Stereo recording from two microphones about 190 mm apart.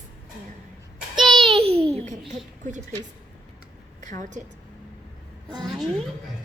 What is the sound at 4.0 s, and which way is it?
Speech, 40° right (ahead or behind).